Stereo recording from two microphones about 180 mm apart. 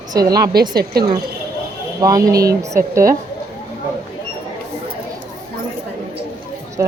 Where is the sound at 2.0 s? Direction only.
20° right (ahead or behind).